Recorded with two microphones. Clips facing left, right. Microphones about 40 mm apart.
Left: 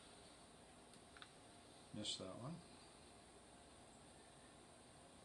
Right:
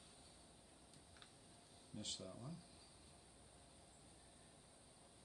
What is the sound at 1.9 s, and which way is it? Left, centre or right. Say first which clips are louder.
Speech: left 2 dB; left.